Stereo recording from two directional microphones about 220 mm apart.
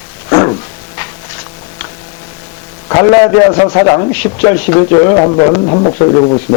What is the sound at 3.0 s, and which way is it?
A man's voice, 30° left (ahead or behind).